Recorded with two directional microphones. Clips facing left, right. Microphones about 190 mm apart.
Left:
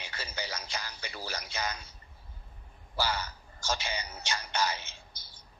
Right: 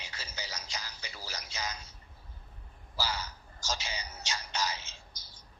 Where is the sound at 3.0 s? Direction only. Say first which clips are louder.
Left 4 dB; 60° left (ahead or behind).